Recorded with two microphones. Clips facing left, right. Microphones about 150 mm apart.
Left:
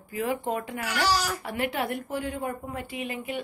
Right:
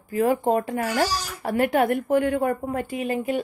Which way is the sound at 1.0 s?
75° left (ahead or behind).